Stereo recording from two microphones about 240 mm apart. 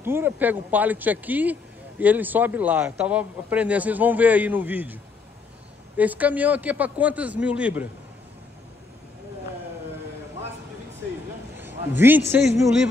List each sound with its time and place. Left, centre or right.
0.0 s speech: centre
5.9 s speech: centre
11.5 s a man's voice: centre